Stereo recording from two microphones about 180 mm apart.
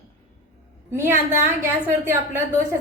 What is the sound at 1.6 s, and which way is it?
Speech, 15° right (ahead or behind).